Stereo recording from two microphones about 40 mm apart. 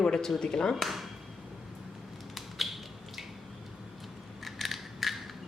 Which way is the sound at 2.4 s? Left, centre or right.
Centre.